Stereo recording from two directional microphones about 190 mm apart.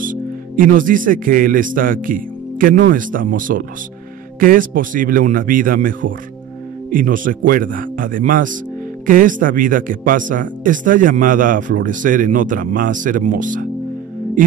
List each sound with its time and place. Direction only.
0.0 s speech: 45° right (ahead or behind)